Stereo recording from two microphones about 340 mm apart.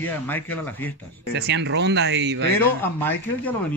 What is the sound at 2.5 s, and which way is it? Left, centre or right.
A man's voice, centre.